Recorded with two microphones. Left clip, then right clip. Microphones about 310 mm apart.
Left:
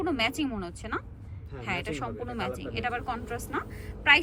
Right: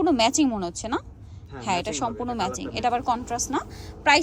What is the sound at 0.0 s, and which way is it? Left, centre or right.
Speech, centre.